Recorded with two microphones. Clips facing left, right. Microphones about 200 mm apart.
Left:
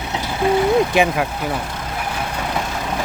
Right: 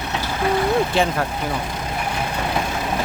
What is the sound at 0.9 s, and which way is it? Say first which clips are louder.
Speech: left 3 dB; 10° left (ahead or behind).